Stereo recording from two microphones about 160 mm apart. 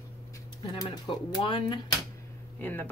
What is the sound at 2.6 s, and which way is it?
Speech, 10° left (ahead or behind).